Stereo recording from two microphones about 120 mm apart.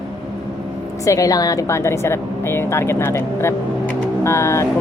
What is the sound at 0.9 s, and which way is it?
A woman's voice, 25° left (ahead or behind).